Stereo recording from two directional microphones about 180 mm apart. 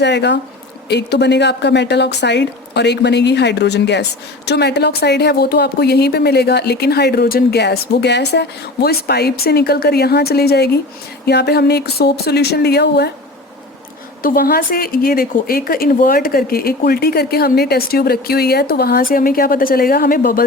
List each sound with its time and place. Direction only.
0.0 s a woman's voice: 75° left (ahead or behind)
14.2 s a woman's voice: 55° left (ahead or behind)